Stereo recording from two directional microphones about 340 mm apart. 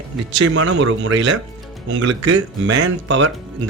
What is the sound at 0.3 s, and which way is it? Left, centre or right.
Speech, right.